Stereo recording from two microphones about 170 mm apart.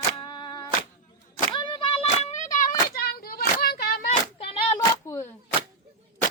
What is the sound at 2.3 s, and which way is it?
Child singing, 50° left (ahead or behind).